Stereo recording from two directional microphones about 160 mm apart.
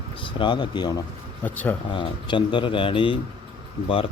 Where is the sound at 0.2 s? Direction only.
30° left (ahead or behind).